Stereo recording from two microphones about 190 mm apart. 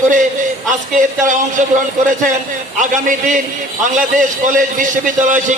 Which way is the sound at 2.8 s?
45° right (ahead or behind).